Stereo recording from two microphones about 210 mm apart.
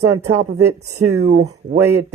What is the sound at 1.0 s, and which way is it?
Speech, 90° right.